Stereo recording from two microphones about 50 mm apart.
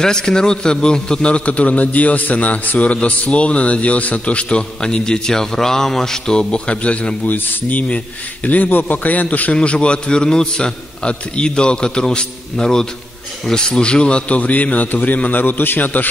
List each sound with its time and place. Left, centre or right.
0.0 s a man's voice: centre
8.5 s a man's voice: left
9.5 s a man's voice: left